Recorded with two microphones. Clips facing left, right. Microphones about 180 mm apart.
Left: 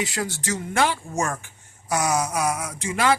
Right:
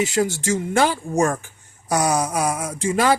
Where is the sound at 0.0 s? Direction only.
25° right (ahead or behind).